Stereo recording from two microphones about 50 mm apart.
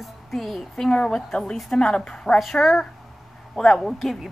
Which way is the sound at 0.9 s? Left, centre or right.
Centre.